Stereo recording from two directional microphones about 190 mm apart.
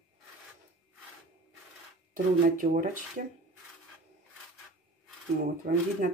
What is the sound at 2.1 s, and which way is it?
Speech, 45° right (ahead or behind).